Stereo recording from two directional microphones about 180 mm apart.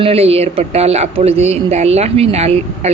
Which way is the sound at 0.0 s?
35° right (ahead or behind).